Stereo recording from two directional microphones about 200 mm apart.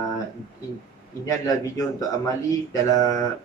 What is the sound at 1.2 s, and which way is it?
Speech, 15° left (ahead or behind).